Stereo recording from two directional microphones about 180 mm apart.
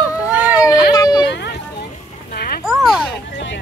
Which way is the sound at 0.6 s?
20° left (ahead or behind).